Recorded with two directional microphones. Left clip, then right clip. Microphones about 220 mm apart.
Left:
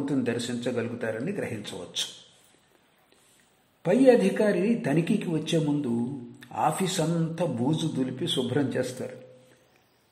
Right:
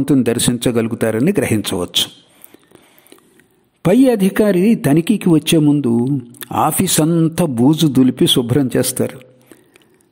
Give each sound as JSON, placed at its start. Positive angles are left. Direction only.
{"t": 0.0, "sound": "speech", "side_deg": -50}
{"t": 3.8, "sound": "speech", "side_deg": -50}